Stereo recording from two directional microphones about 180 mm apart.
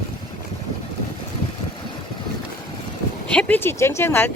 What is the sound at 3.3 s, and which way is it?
Speech, 5° left (ahead or behind).